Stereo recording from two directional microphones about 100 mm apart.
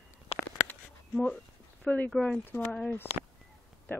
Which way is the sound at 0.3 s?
80° left.